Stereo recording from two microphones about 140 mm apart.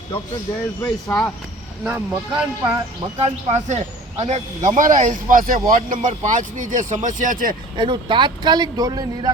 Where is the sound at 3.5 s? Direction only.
50° right (ahead or behind); by 5.6 s 85° right.